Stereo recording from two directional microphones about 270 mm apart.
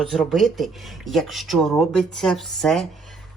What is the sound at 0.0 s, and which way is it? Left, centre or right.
Speech, centre.